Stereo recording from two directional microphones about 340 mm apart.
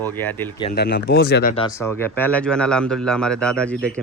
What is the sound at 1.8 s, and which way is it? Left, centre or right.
A man's voice, centre.